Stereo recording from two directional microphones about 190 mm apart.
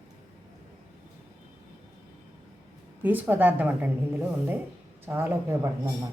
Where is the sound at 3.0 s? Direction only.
10° right (ahead or behind).